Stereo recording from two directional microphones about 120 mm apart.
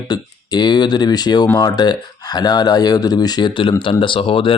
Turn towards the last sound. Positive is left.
turn(degrees=50)  # may be behind; listen again after turning